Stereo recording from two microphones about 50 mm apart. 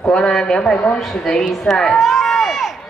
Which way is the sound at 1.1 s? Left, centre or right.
Centre.